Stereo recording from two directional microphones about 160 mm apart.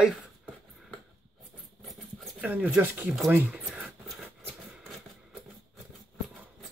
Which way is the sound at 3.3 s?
10° right (ahead or behind).